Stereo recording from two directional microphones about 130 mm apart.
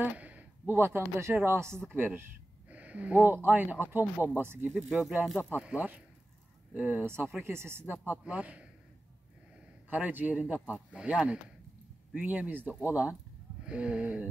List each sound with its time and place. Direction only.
0.0 s speech: 10° right (ahead or behind)
4.0 s speech: 15° left (ahead or behind)
4.4 s speech: 15° right (ahead or behind)
4.6 s speech: centre (ahead or behind)
9.8 s speech: 15° right (ahead or behind)